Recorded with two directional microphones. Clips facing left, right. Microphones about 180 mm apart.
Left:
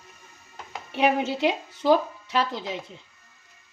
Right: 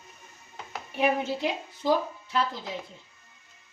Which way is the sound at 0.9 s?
80° left.